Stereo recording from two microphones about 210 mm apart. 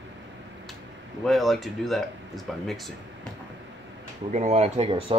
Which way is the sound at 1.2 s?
Centre (ahead or behind).